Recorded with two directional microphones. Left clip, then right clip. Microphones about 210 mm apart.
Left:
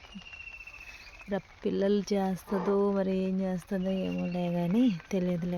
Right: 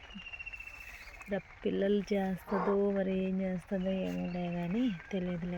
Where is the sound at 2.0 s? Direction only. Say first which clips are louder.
Left 3 dB; 20° left (ahead or behind).